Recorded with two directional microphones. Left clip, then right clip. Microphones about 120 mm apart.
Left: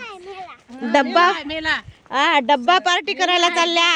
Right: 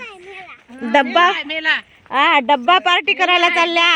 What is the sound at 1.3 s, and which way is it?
Speech, 35° left (ahead or behind).